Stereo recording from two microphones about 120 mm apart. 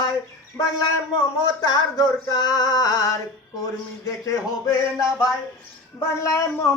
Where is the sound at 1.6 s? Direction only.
35° left (ahead or behind).